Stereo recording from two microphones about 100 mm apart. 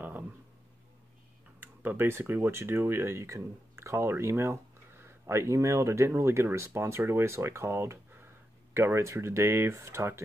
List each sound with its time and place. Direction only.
1.6 s speech: 20° right (ahead or behind)